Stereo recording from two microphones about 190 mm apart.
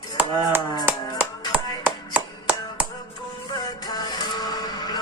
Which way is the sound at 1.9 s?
5° right (ahead or behind).